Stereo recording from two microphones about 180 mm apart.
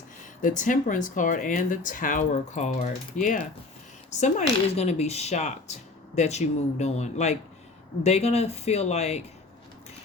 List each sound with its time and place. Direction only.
0.4 s speech: 45° left (ahead or behind)